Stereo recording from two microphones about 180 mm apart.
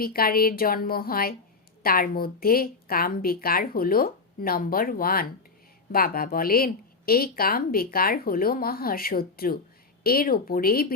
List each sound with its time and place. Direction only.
0.0 s speech: 55° left (ahead or behind)